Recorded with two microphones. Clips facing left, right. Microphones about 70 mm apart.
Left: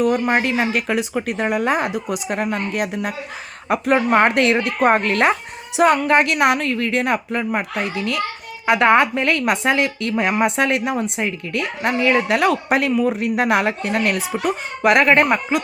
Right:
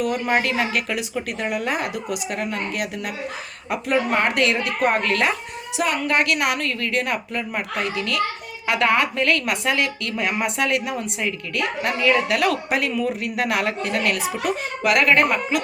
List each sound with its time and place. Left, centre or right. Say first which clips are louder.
0.0 s a woman's voice: left 4 dB; left
3.7 s a woman's voice: left 4 dB; left
4.1 s a woman's voice: left 5 dB; left
5.7 s a woman's voice: left 8 dB; left
6.1 s a woman's voice: left 5 dB; left